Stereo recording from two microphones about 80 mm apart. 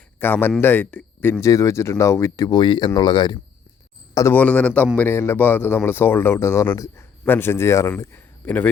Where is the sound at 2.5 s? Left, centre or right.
Left.